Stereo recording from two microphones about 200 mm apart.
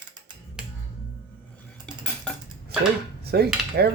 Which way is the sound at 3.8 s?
55° right (ahead or behind).